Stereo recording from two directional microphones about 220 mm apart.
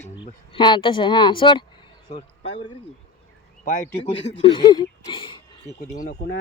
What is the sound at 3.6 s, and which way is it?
Speech, 40° left (ahead or behind).